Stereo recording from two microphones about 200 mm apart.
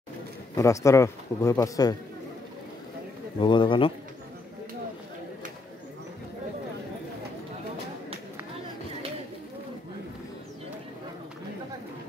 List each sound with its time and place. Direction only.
0.6 s speech: 15° left (ahead or behind)
3.3 s a man's voice: 25° left (ahead or behind)